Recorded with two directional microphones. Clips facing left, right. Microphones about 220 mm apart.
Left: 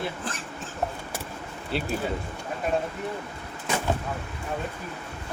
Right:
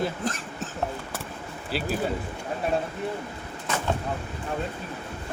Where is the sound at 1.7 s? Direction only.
5° right (ahead or behind).